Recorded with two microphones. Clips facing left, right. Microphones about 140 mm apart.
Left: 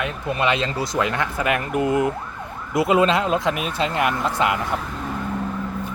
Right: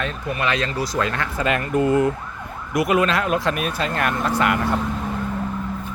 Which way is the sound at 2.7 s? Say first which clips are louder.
Left 2 dB; 25° left (ahead or behind).